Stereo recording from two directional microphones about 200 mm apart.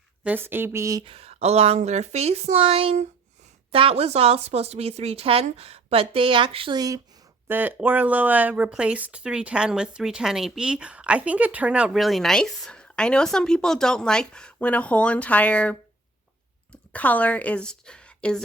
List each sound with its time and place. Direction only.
0.3 s speech: 10° right (ahead or behind)
1.0 s a woman's voice: 30° right (ahead or behind); by 15.8 s 5° left (ahead or behind)
16.9 s a woman's voice: 5° left (ahead or behind)